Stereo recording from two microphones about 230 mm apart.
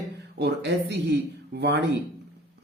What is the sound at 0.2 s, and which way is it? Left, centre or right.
Speech, right.